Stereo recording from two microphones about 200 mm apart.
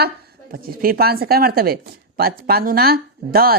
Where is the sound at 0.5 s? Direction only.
50° right (ahead or behind).